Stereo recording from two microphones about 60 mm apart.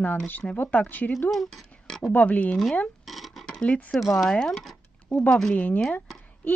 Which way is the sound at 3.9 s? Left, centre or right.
Centre.